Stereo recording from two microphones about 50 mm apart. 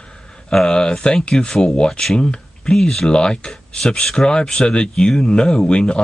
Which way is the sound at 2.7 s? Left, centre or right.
Centre.